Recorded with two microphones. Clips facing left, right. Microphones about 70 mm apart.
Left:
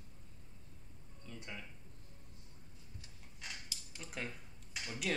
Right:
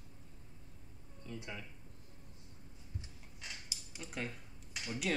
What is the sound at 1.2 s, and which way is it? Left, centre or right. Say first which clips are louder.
Speech: right 3 dB; centre.